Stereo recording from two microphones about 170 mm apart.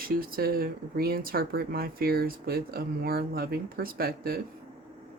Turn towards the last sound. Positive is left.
turn(degrees=-60)  # may be behind; listen again after turning